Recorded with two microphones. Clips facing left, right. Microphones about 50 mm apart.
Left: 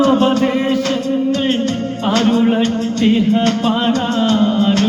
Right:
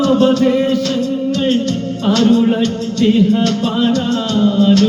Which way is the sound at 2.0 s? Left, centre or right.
Left.